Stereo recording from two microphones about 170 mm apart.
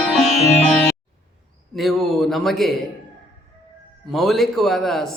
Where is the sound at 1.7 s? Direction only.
Centre (ahead or behind).